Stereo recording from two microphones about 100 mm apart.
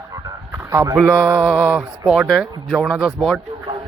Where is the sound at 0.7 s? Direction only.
30° right (ahead or behind).